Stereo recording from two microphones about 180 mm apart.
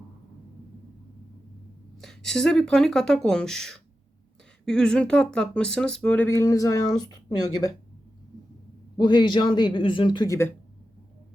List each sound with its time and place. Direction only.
2.0 s speech: centre (ahead or behind); by 7.7 s 20° left (ahead or behind)
9.0 s speech: 25° left (ahead or behind)